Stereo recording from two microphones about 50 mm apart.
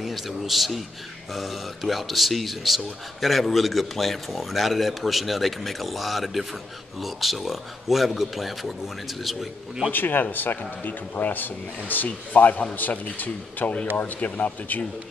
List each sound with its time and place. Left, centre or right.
0.0 s a man's voice: centre
9.8 s speech: left